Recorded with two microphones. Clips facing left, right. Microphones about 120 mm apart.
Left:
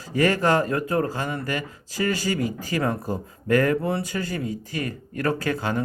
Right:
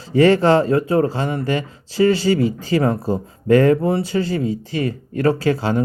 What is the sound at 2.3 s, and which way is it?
Speech, 35° right (ahead or behind).